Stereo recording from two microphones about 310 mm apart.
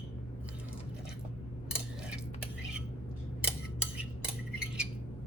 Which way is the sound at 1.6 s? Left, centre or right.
Centre.